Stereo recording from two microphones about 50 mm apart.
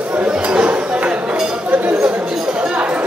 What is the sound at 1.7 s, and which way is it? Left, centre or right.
Chatter, right.